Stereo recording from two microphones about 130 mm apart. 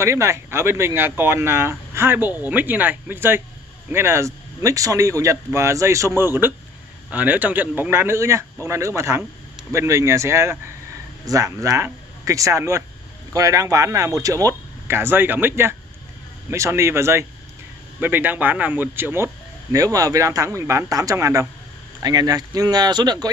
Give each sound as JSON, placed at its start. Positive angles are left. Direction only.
{"t": 0.0, "sound": "speech", "side_deg": -20}